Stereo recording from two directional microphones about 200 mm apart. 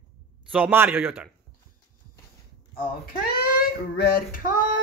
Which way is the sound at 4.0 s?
45° left (ahead or behind).